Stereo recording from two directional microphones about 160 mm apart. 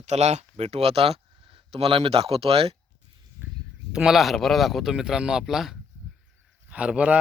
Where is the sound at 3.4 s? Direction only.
10° right (ahead or behind).